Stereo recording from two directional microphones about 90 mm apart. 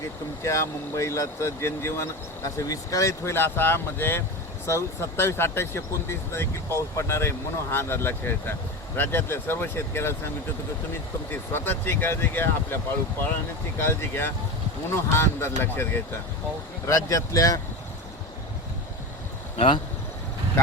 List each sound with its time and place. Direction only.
0.4 s speech: 35° left (ahead or behind)
11.3 s speech: 25° left (ahead or behind)
16.8 s speech: 35° left (ahead or behind)
19.5 s speech: 75° left (ahead or behind)